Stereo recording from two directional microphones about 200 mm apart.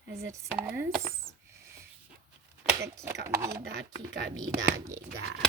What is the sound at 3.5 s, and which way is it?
Speech, 55° right (ahead or behind).